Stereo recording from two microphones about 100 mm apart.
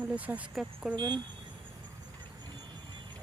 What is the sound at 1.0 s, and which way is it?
Speech, 45° right (ahead or behind).